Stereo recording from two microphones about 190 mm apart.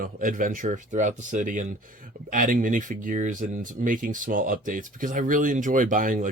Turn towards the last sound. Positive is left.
turn(degrees=-45)  # may be behind; listen again after turning